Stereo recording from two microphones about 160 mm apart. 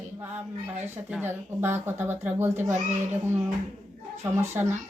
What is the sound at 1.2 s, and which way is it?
Speech, 15° right (ahead or behind).